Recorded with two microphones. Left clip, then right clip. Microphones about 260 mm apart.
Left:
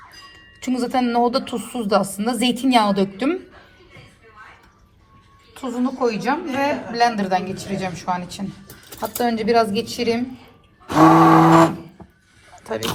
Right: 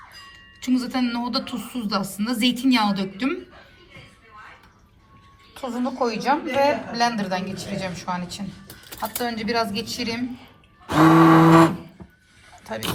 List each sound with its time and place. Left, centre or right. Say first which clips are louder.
0.6 s a woman's voice: left 3 dB; centre
5.5 s a woman's voice: left 2 dB; right; by 10.2 s centre
11.0 s a sound: left 3 dB; centre
12.6 s speech: left 4 dB; centre